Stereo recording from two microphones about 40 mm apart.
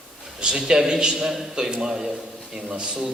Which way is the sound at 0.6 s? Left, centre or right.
Centre.